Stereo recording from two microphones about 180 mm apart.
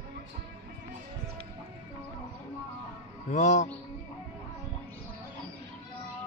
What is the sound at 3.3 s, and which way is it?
Music, 45° left (ahead or behind).